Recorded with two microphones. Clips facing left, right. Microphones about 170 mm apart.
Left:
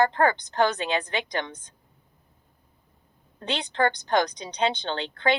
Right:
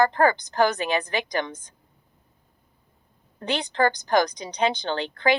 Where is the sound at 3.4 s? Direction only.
10° right (ahead or behind).